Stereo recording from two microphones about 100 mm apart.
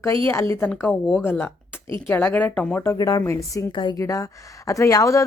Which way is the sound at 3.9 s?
35° left (ahead or behind).